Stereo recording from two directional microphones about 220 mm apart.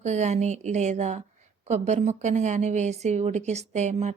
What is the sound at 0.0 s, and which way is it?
A woman's voice, 30° right (ahead or behind).